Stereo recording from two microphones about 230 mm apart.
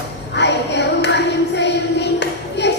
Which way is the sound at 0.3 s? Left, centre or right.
Left.